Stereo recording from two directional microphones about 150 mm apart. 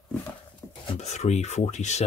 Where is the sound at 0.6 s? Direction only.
10° left (ahead or behind).